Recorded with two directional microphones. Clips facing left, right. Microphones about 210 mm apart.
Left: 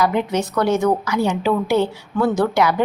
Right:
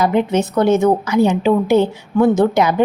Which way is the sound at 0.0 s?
25° right (ahead or behind).